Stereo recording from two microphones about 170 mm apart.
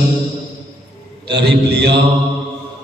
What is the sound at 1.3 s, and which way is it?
Mantra, 75° right (ahead or behind).